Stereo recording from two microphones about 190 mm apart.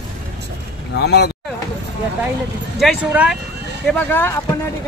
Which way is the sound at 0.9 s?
60° left (ahead or behind).